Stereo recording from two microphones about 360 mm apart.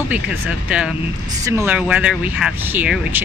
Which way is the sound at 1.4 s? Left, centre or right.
Centre.